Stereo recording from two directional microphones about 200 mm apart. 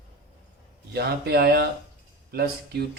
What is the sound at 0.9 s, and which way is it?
Speech, 55° right (ahead or behind).